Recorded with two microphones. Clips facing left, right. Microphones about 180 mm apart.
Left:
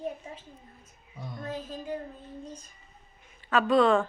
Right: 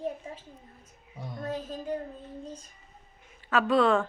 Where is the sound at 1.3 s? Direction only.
40° right (ahead or behind).